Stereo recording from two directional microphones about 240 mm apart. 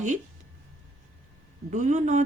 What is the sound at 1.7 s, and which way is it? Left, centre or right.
Speech, right.